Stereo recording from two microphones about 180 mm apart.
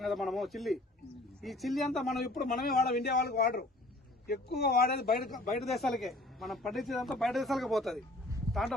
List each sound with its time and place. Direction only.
0.0 s a man's voice: centre (ahead or behind)
2.3 s a man's voice: 55° left (ahead or behind)
5.2 s speech: centre (ahead or behind)